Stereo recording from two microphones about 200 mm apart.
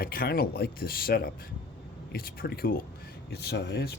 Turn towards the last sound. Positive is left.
turn(degrees=55)  # may be behind; listen again after turning